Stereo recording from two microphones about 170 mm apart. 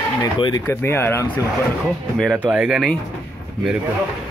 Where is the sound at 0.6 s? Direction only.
15° left (ahead or behind).